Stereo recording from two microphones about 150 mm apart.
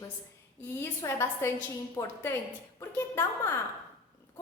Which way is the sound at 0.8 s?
15° left (ahead or behind).